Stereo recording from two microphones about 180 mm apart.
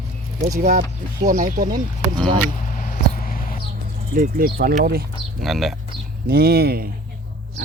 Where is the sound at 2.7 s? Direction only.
50° left (ahead or behind).